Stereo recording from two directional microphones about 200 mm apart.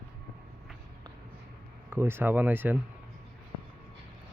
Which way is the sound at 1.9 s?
10° right (ahead or behind).